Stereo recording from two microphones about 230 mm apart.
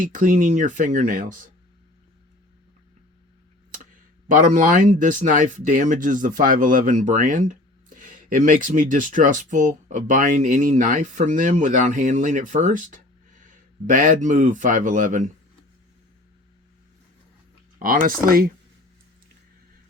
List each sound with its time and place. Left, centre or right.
0.0 s speech: right
4.3 s a man's voice: right
17.7 s speech: right